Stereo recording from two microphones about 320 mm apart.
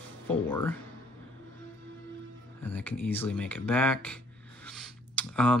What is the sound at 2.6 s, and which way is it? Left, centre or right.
Speech, centre.